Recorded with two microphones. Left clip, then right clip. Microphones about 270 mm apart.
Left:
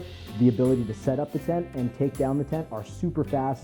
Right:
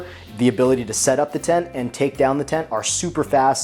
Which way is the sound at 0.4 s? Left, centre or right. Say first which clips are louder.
Right 6 dB; centre.